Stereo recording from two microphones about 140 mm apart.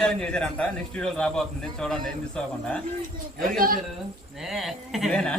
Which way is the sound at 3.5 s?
90° right.